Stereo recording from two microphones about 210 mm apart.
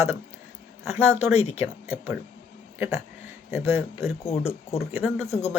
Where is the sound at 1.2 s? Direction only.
30° left (ahead or behind).